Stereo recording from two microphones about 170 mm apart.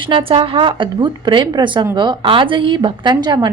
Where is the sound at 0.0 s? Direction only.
30° right (ahead or behind).